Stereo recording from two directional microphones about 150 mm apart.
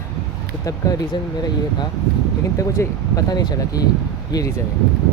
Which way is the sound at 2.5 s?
20° left (ahead or behind).